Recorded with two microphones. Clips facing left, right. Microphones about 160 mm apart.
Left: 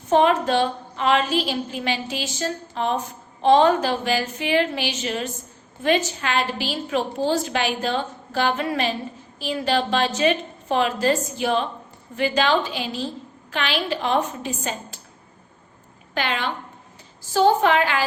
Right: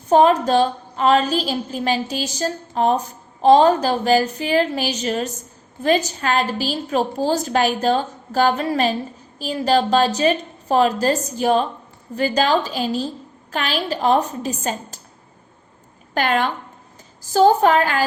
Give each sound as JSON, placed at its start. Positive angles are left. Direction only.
{"t": 0.1, "sound": "a woman's voice", "side_deg": -35}
{"t": 16.1, "sound": "a woman's voice", "side_deg": -45}